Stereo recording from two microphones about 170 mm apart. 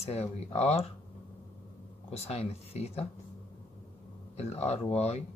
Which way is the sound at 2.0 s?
40° left (ahead or behind).